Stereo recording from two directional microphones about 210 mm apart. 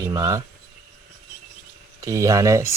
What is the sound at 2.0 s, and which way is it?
Speech, 15° right (ahead or behind).